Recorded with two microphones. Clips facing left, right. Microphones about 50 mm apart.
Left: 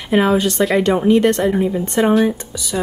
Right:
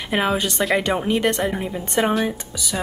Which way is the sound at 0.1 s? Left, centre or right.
Centre.